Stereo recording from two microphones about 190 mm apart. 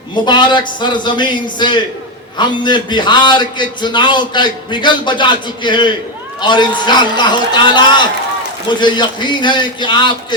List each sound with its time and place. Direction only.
0.3 s a man's voice: 25° left (ahead or behind)